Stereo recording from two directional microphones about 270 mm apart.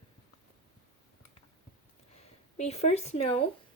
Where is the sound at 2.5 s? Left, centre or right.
Left.